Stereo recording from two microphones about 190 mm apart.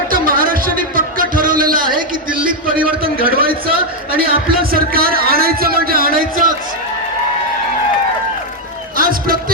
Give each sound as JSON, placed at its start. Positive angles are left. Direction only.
{"t": 0.1, "sound": "music", "side_deg": -50}
{"t": 2.4, "sound": "a sound", "side_deg": -45}
{"t": 4.1, "sound": "a man's voice", "side_deg": -50}
{"t": 9.0, "sound": "music", "side_deg": -50}